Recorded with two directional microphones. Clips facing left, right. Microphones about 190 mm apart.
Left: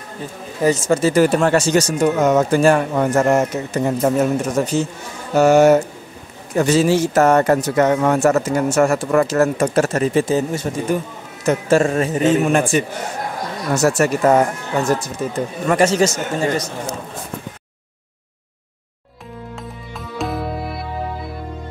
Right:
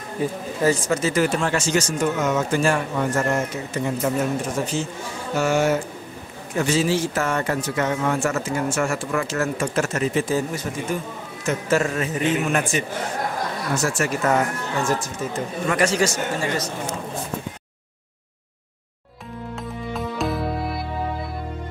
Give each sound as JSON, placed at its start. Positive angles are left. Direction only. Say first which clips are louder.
{"t": 0.2, "sound": "a man's voice", "louder": "right 7 dB", "side_deg": -10}
{"t": 0.6, "sound": "speech", "louder": "left 5 dB", "side_deg": 20}
{"t": 2.7, "sound": "speech", "louder": "left 6 dB", "side_deg": 55}
{"t": 3.2, "sound": "speech", "louder": "left 8 dB", "side_deg": 75}
{"t": 3.7, "sound": "speech", "louder": "left 6 dB", "side_deg": 40}
{"t": 12.5, "sound": "speech", "louder": "left 6 dB", "side_deg": 30}
{"t": 13.8, "sound": "speech", "louder": "left 8 dB", "side_deg": 40}
{"t": 15.8, "sound": "speech", "louder": "left 5 dB", "side_deg": 20}
{"t": 19.9, "sound": "music", "louder": "even", "side_deg": 0}